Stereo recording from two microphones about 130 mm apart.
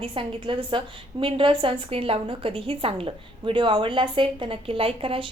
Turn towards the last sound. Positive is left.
turn(degrees=-45)  # may be behind; listen again after turning